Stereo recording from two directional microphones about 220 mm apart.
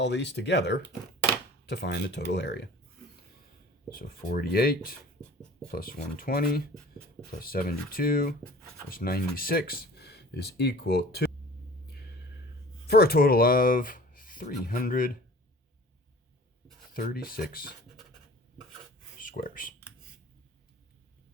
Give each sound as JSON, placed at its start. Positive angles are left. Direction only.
{"t": 0.0, "sound": "speech", "side_deg": 50}
{"t": 3.9, "sound": "speech", "side_deg": 40}
{"t": 12.9, "sound": "speech", "side_deg": 45}
{"t": 16.9, "sound": "speech", "side_deg": 40}
{"t": 19.2, "sound": "speech", "side_deg": 40}